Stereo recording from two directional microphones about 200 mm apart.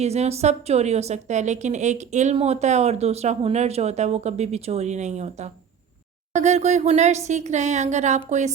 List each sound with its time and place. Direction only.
0.0 s a woman's voice: 30° right (ahead or behind)